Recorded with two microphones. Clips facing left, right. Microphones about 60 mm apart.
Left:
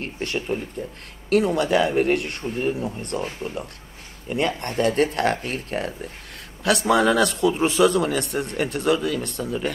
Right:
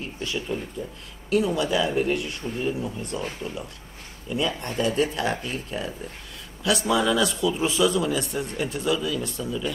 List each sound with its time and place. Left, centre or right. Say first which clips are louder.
0.0 s a man's voice: left 3 dB; left